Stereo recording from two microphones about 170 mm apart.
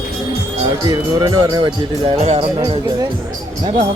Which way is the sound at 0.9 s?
20° right (ahead or behind).